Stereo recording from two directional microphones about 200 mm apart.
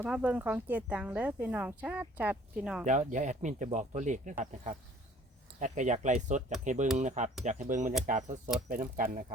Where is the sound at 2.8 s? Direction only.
40° right (ahead or behind).